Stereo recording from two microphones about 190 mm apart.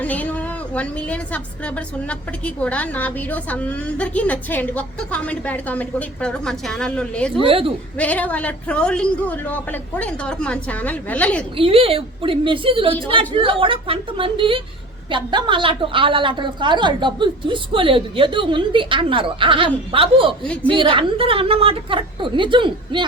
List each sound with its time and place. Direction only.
0.0 s a woman's voice: 10° left (ahead or behind)
7.4 s a woman's voice: 30° right (ahead or behind)
7.9 s a woman's voice: 10° left (ahead or behind)
11.5 s a woman's voice: 30° right (ahead or behind)
20.5 s a woman's voice: 5° left (ahead or behind)
20.7 s a woman's voice: 25° right (ahead or behind)